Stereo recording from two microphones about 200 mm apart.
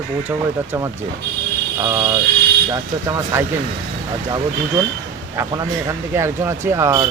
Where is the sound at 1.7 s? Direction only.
15° right (ahead or behind).